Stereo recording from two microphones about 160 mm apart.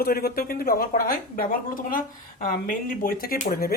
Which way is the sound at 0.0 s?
70° left (ahead or behind).